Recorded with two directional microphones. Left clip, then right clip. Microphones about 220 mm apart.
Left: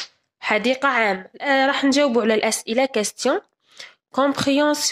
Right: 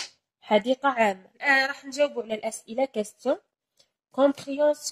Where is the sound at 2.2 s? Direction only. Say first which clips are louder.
Left 12 dB; 30° left (ahead or behind).